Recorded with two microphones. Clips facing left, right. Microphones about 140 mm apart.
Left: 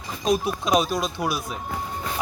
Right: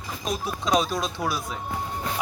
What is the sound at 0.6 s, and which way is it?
Speech, 5° left (ahead or behind).